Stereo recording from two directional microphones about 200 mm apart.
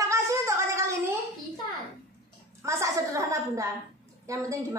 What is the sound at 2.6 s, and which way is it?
Speech, 15° right (ahead or behind).